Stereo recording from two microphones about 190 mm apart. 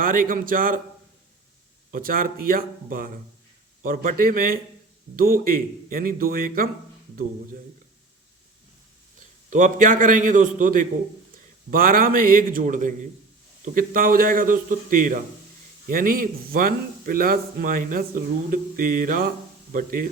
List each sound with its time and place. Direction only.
0.0 s a man's voice: 45° right (ahead or behind)
1.9 s a man's voice: 50° right (ahead or behind)
9.5 s a man's voice: 45° right (ahead or behind)